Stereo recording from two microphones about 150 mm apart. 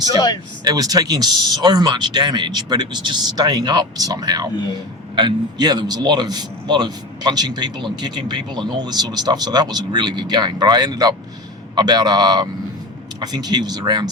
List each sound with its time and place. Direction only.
0.6 s speech: 25° right (ahead or behind)
4.5 s a man's voice: 30° left (ahead or behind)
5.1 s speech: 30° right (ahead or behind)